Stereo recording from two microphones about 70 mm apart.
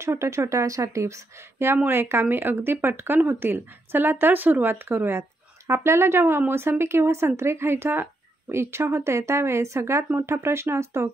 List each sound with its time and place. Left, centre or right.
0.0 s speech: right